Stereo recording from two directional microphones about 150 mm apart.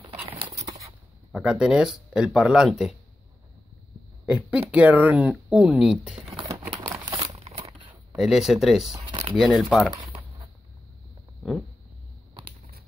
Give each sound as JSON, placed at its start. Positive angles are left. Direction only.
{"t": 0.3, "sound": "a sound", "side_deg": -35}
{"t": 0.7, "sound": "a sound", "side_deg": -25}
{"t": 1.3, "sound": "speech", "side_deg": -5}
{"t": 4.3, "sound": "speech", "side_deg": -5}
{"t": 6.3, "sound": "typewriter", "side_deg": -25}
{"t": 7.1, "sound": "crumpling", "side_deg": -35}
{"t": 8.2, "sound": "speech", "side_deg": -5}